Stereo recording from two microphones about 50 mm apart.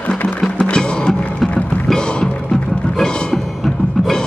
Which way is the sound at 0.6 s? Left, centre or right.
Centre.